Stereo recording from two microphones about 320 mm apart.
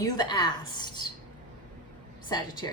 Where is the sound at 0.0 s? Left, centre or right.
Centre.